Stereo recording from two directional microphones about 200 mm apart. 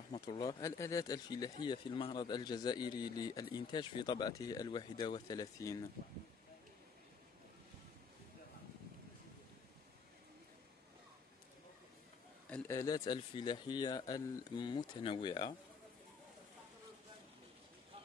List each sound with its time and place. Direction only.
0.1 s speech: 20° left (ahead or behind)
12.4 s speech: 10° left (ahead or behind)